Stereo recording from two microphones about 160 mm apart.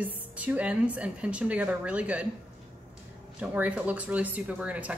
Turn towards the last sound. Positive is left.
turn(degrees=-10)  # may be behind; listen again after turning